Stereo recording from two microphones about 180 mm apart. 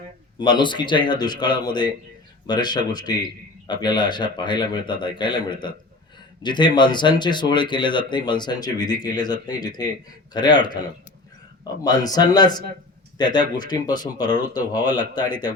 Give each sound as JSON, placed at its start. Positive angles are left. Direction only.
{"t": 0.3, "sound": "speech", "side_deg": 25}